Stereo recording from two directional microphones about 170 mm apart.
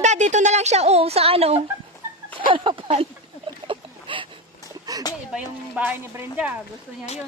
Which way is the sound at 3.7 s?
30° right (ahead or behind).